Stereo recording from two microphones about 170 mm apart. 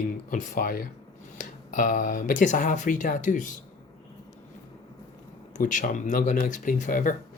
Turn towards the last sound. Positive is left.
turn(degrees=50)  # may be behind; listen again after turning